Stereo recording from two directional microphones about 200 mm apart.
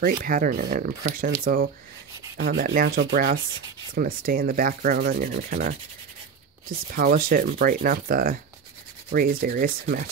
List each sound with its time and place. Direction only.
0.0 s rub: 45° right (ahead or behind)
6.9 s rub: 45° right (ahead or behind)